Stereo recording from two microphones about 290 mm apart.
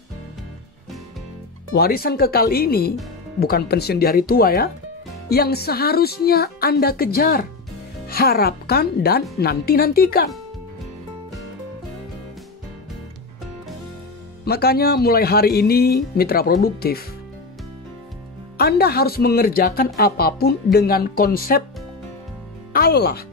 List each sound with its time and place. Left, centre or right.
1.8 s speech: left
14.4 s speech: left
18.6 s speech: left
22.7 s speech: left